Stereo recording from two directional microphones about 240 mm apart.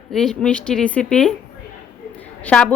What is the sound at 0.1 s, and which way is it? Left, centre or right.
A woman's voice, centre.